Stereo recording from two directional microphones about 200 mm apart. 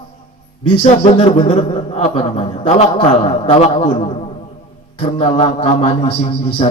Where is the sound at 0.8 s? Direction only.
35° left (ahead or behind).